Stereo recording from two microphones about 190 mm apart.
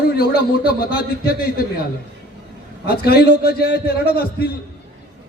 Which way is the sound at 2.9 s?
55° left (ahead or behind).